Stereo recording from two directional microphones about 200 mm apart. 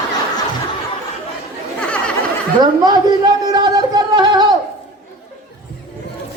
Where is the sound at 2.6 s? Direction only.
20° right (ahead or behind).